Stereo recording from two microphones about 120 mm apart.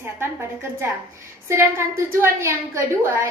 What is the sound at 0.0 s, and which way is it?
A woman's voice, 20° right (ahead or behind).